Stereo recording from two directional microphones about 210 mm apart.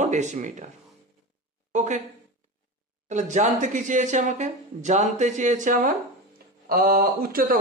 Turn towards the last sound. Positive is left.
turn(degrees=-45)  # may be behind; listen again after turning